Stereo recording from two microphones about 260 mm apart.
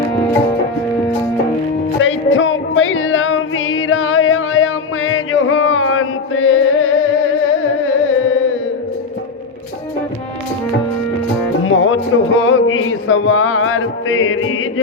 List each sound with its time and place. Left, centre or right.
2.0 s music: left
11.6 s music: left